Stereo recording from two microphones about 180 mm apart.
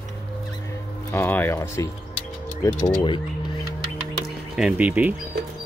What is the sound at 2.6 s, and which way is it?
Speech, 25° left (ahead or behind).